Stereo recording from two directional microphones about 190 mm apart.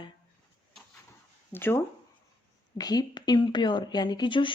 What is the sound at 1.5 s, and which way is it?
Speech, 10° left (ahead or behind).